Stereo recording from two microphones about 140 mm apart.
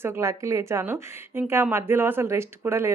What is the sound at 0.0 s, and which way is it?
A woman's voice, 20° right (ahead or behind).